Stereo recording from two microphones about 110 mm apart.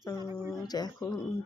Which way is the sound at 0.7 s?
35° left (ahead or behind).